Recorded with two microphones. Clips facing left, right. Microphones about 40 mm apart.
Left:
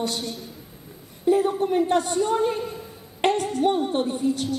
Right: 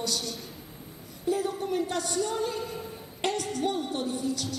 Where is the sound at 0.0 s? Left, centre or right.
Left.